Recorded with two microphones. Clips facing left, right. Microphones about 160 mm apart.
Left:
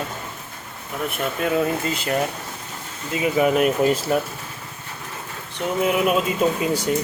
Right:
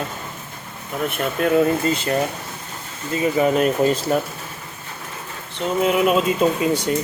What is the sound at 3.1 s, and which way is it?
Speech, 10° left (ahead or behind).